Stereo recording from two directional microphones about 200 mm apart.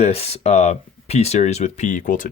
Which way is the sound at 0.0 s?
30° left (ahead or behind).